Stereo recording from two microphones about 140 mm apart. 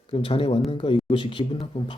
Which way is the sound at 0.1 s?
40° left (ahead or behind).